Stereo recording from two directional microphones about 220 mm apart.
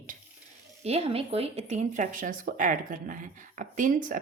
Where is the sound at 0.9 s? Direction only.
25° right (ahead or behind).